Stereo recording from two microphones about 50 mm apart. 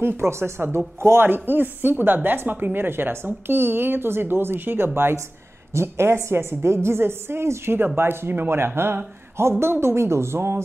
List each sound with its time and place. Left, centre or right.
0.0 s speech: right